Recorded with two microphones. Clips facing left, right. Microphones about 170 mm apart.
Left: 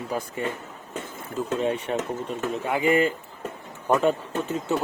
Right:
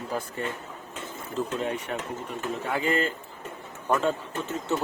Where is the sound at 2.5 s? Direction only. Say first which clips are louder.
Left 5 dB; 15° left (ahead or behind).